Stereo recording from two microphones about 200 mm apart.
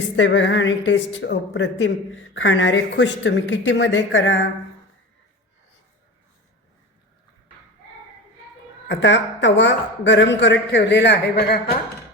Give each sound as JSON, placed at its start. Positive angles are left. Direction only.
{"t": 0.2, "sound": "speech", "side_deg": 65}
{"t": 8.9, "sound": "speech", "side_deg": 65}